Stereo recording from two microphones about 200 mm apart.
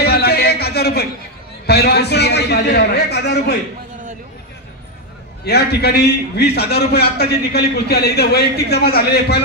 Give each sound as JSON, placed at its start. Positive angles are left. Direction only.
{"t": 0.0, "sound": "a sound", "side_deg": 50}
{"t": 1.7, "sound": "a man's voice", "side_deg": 55}
{"t": 5.4, "sound": "a man's voice", "side_deg": 55}